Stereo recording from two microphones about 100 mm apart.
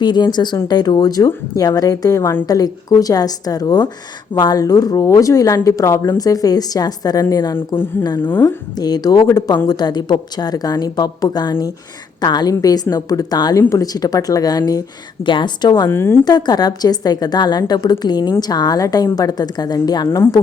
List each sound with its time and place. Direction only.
0.0 s a woman's voice: 50° left (ahead or behind); by 7.9 s 30° left (ahead or behind)
8.2 s speech: 20° left (ahead or behind)
8.4 s a woman's voice: 40° left (ahead or behind)
15.2 s a woman's voice: 50° left (ahead or behind)
15.9 s speech: 25° left (ahead or behind)
16.2 s a woman's voice: 45° left (ahead or behind)
20.1 s speech: 25° left (ahead or behind)